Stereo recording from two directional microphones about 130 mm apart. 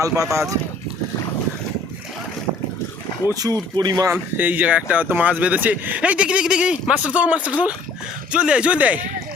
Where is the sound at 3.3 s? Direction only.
30° right (ahead or behind).